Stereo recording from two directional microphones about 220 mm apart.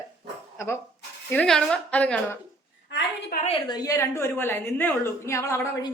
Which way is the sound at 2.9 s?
50° left (ahead or behind).